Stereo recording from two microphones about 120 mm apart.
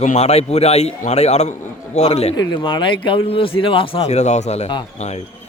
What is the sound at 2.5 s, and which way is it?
Speech, 45° left (ahead or behind).